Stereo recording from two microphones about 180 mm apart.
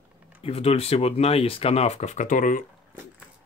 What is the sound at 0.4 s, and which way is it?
Speech, 35° left (ahead or behind).